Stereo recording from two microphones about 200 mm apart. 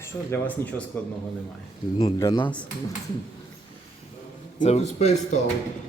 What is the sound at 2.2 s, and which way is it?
Speech, 15° left (ahead or behind).